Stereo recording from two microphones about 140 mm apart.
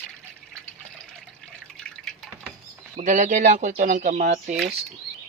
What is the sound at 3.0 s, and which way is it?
Speech, 60° right (ahead or behind).